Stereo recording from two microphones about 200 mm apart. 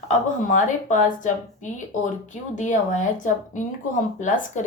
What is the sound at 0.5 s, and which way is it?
Speech, 40° left (ahead or behind).